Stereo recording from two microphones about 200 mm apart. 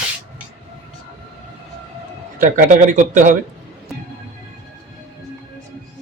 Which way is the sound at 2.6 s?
40° right (ahead or behind).